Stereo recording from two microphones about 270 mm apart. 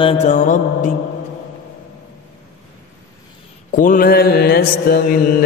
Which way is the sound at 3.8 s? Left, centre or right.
Left.